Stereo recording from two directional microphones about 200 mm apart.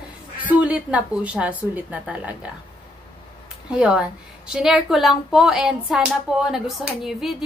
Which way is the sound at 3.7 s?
5° right (ahead or behind).